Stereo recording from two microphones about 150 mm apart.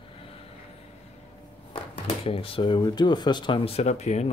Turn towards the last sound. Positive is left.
turn(degrees=45)  # may be behind; listen again after turning